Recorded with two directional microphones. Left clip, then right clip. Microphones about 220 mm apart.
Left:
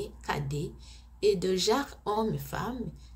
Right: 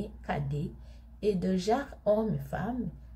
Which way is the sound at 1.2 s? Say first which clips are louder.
Left 4 dB; 30° left (ahead or behind).